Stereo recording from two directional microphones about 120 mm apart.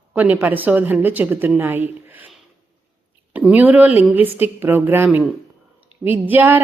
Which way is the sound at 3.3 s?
15° right (ahead or behind).